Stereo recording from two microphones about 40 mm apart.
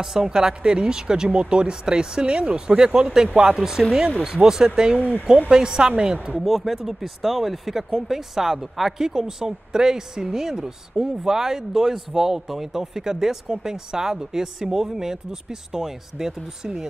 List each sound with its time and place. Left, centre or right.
0.0 s speech: centre
6.1 s speech: right
6.4 s speech: centre